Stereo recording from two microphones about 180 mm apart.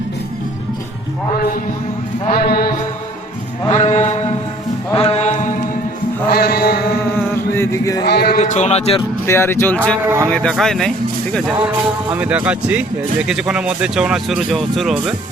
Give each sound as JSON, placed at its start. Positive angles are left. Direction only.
{"t": 1.4, "sound": "a man's voice", "side_deg": 50}
{"t": 2.3, "sound": "a sound", "side_deg": 60}
{"t": 3.7, "sound": "mantra", "side_deg": 40}
{"t": 4.9, "sound": "music", "side_deg": 35}
{"t": 6.3, "sound": "mantra", "side_deg": 60}
{"t": 7.2, "sound": "music", "side_deg": 15}
{"t": 8.0, "sound": "a sound", "side_deg": 65}
{"t": 8.4, "sound": "speech", "side_deg": 40}
{"t": 9.0, "sound": "speech", "side_deg": 15}